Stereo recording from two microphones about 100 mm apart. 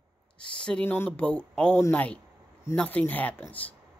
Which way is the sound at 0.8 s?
20° left (ahead or behind).